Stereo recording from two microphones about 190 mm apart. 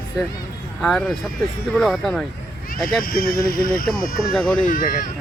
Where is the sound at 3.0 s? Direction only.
50° left (ahead or behind).